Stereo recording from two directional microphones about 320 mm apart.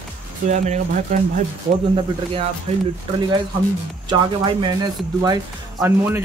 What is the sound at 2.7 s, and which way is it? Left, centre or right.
Speech, right.